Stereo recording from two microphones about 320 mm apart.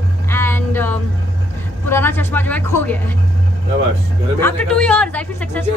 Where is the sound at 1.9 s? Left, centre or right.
Centre.